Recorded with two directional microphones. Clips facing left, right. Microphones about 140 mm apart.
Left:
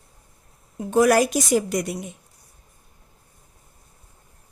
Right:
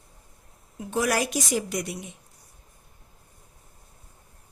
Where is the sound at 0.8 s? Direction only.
50° left (ahead or behind).